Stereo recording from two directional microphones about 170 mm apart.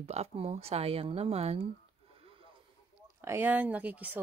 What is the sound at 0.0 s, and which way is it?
Speech, 40° right (ahead or behind).